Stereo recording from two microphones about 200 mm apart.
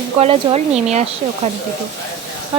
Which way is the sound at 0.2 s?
30° right (ahead or behind).